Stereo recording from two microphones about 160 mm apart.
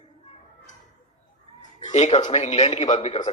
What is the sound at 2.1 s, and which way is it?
Speech, 30° left (ahead or behind).